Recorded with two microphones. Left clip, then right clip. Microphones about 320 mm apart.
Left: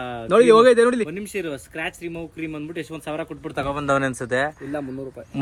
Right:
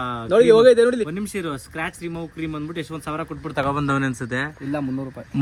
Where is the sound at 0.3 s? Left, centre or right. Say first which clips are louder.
Even; left.